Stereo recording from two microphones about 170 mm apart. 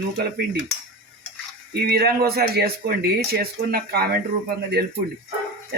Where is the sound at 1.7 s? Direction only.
65° right (ahead or behind).